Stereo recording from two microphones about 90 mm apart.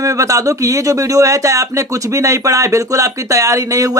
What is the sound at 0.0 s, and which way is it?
Speech, 35° right (ahead or behind).